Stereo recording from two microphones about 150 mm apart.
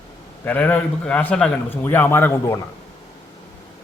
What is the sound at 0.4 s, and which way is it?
A man's voice, 10° left (ahead or behind).